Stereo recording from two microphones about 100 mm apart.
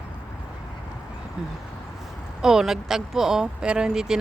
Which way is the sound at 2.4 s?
5° right (ahead or behind).